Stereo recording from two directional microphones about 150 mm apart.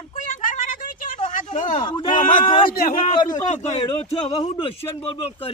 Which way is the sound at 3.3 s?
50° left (ahead or behind).